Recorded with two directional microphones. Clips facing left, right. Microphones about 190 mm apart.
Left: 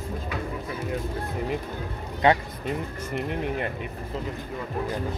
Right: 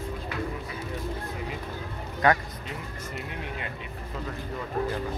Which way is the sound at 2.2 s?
20° left (ahead or behind).